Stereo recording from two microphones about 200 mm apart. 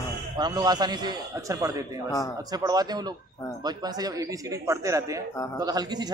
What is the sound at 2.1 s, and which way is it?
Speech, 15° left (ahead or behind).